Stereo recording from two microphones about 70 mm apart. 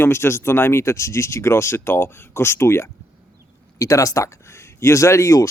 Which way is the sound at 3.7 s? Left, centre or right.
Left.